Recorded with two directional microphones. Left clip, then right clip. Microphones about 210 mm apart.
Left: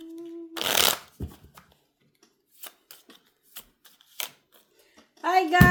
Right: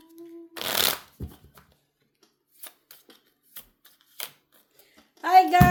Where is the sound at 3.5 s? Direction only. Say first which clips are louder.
Left 2 dB; 15° left (ahead or behind).